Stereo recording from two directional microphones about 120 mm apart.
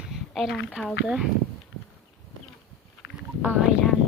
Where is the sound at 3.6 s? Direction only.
5° left (ahead or behind).